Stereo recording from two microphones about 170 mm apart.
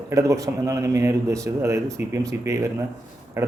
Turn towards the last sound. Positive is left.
turn(degrees=-15)  # may be behind; listen again after turning